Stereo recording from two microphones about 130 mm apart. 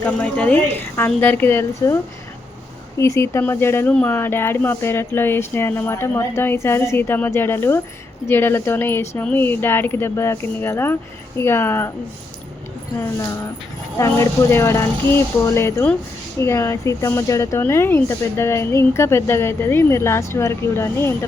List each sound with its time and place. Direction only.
0.0 s speech: 10° left (ahead or behind)
3.0 s speech: 20° left (ahead or behind)
14.0 s speech: 20° left (ahead or behind)